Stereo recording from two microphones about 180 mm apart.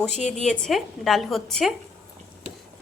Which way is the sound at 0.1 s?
40° left (ahead or behind).